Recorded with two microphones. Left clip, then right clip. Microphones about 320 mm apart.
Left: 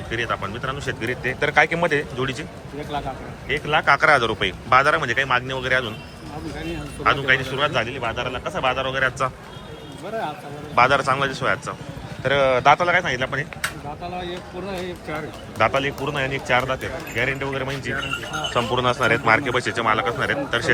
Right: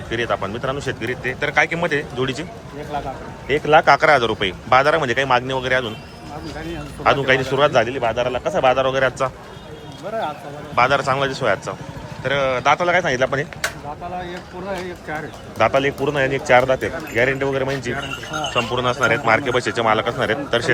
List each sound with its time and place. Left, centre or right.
0.1 s speech: centre
3.5 s speech: centre
7.0 s speech: centre
10.8 s speech: centre
15.5 s speech: centre